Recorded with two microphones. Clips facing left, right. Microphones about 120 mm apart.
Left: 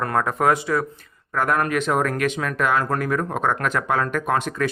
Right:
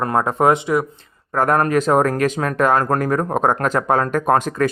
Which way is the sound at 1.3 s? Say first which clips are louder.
Right 5 dB; 40° right (ahead or behind).